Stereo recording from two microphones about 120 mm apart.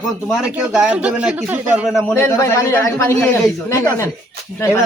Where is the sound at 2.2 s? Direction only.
20° left (ahead or behind).